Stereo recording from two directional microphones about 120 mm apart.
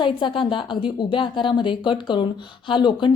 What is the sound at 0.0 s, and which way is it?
A woman's voice, 40° left (ahead or behind).